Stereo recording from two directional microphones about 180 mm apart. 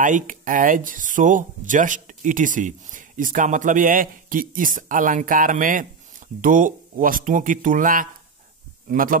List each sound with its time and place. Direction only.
0.0 s speech: 45° right (ahead or behind)